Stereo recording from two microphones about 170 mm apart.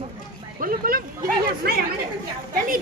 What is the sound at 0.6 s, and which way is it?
Speech, 60° right (ahead or behind).